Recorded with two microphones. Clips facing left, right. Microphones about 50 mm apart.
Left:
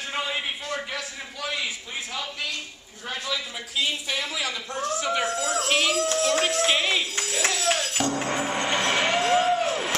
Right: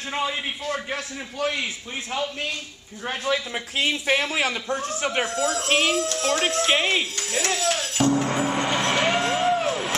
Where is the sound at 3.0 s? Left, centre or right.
Right.